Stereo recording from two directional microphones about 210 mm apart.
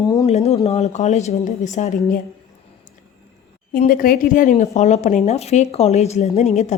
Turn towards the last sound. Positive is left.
turn(degrees=30)  # may be behind; listen again after turning